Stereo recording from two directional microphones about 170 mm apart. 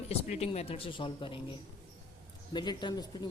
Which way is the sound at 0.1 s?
40° left (ahead or behind).